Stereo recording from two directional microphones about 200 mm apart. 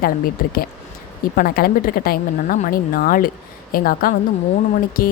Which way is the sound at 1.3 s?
50° left (ahead or behind).